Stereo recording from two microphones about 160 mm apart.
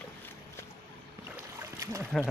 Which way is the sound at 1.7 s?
20° right (ahead or behind).